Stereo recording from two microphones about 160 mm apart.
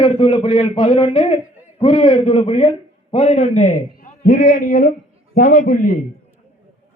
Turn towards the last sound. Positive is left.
turn(degrees=65)  # may be behind; listen again after turning